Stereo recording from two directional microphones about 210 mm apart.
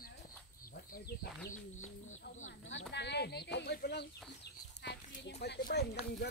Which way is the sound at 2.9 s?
55° left (ahead or behind).